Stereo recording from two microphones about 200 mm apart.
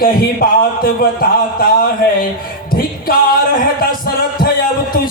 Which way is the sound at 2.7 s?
45° left (ahead or behind).